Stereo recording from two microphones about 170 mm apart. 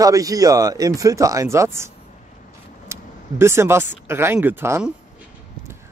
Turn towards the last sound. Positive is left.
turn(degrees=-15)  # may be behind; listen again after turning